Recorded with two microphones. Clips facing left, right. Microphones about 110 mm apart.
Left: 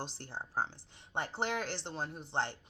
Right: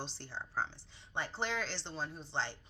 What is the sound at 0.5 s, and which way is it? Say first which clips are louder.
Speech: left 2 dB; 45° left (ahead or behind).